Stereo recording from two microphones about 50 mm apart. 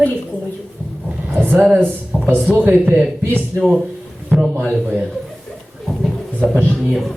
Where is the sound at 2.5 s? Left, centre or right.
Right.